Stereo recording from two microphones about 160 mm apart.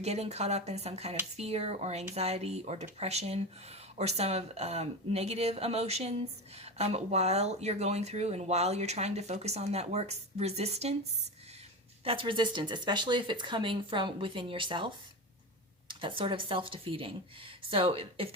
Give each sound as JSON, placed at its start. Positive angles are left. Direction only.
{"t": 0.0, "sound": "speech", "side_deg": -40}
{"t": 12.0, "sound": "speech", "side_deg": -35}